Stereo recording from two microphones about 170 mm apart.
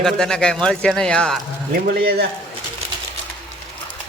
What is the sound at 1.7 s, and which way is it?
Speech, 65° right (ahead or behind).